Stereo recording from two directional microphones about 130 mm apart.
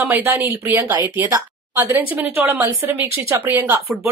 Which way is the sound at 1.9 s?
15° right (ahead or behind).